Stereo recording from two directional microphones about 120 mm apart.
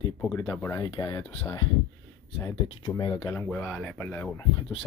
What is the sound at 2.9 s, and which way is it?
Speech, 40° left (ahead or behind).